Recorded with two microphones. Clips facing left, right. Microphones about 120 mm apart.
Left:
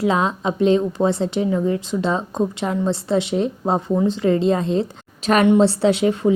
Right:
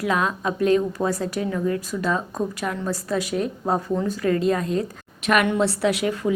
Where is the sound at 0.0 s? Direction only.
25° left (ahead or behind).